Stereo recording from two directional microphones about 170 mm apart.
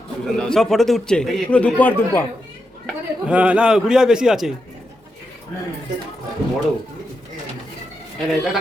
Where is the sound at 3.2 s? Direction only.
5° right (ahead or behind).